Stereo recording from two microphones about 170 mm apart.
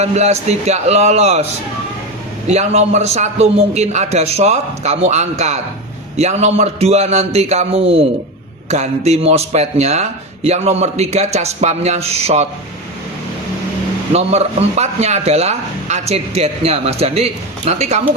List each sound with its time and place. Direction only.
0.0 s speech: 40° right (ahead or behind)
2.5 s speech: 40° right (ahead or behind)
14.1 s speech: 40° right (ahead or behind)